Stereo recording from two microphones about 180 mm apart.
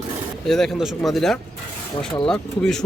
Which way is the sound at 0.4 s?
Centre (ahead or behind).